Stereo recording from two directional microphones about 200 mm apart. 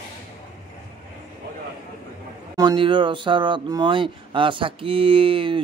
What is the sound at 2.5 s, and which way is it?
Speech, 20° right (ahead or behind).